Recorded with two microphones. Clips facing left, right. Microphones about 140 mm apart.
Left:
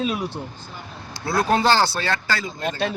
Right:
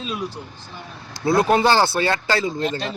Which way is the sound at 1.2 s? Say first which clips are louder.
Right 3 dB; 20° right (ahead or behind).